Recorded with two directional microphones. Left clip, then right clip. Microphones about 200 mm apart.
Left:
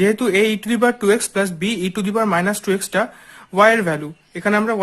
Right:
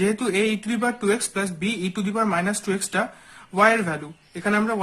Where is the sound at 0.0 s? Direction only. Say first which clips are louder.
Left 6 dB; 40° left (ahead or behind).